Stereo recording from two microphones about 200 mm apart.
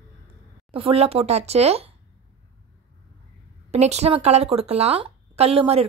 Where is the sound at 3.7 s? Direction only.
30° right (ahead or behind).